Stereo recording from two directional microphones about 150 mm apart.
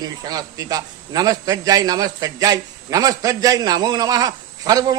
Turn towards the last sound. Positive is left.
turn(degrees=-25)  # may be behind; listen again after turning